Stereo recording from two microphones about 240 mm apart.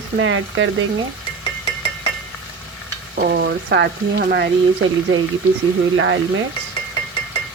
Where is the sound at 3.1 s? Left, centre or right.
Right.